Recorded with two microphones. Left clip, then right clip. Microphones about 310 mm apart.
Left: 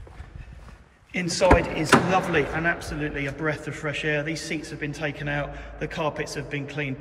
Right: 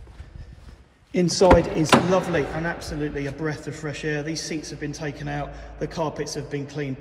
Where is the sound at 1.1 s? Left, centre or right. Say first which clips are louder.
Right 3 dB; centre.